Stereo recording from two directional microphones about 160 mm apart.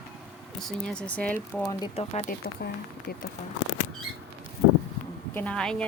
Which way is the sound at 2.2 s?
75° left (ahead or behind).